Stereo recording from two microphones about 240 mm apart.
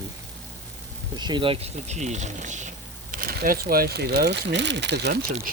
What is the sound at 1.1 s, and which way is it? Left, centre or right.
Speech, centre.